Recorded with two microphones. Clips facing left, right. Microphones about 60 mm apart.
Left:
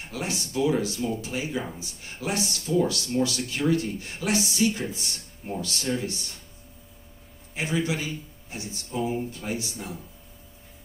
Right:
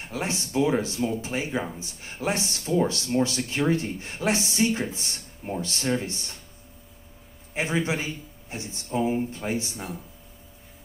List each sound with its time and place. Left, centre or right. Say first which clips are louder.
0.1 s speech: right 2 dB; right
7.5 s speech: right 1 dB; right